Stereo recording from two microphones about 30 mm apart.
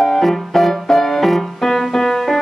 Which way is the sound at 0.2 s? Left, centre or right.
Centre.